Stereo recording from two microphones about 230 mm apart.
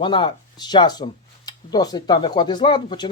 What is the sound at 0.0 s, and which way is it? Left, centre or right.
Speech, left.